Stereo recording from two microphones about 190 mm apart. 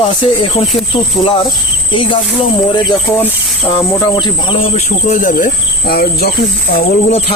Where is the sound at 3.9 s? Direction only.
20° left (ahead or behind).